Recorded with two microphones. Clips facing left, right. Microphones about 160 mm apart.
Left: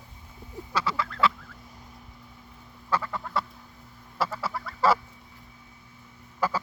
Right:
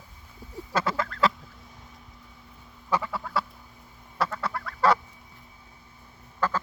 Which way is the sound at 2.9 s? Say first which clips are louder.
Right 1 dB; 10° right (ahead or behind).